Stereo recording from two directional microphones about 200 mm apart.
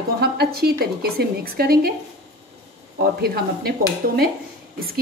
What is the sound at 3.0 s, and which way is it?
Speech, 50° right (ahead or behind).